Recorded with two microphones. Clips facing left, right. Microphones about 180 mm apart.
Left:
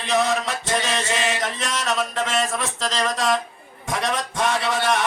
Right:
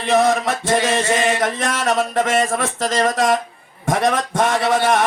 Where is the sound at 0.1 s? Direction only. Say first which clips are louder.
Right 6 dB; 50° right (ahead or behind).